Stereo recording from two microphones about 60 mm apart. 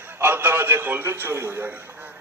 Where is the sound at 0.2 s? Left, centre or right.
Right.